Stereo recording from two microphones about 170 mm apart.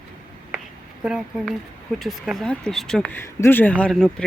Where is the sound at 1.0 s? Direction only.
5° right (ahead or behind).